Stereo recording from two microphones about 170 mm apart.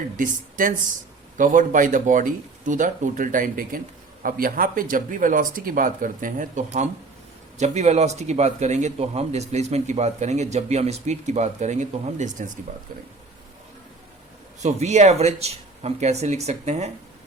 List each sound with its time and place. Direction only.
0.2 s speech: 50° right (ahead or behind)
14.6 s speech: 40° right (ahead or behind)